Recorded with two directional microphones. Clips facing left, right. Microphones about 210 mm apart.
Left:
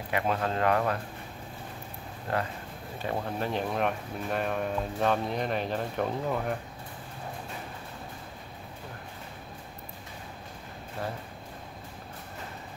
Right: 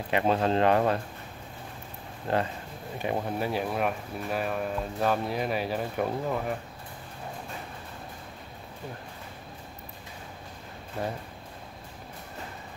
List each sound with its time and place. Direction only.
0.1 s speech: 25° right (ahead or behind)
2.3 s speech: 25° right (ahead or behind)
3.0 s speech: 15° right (ahead or behind)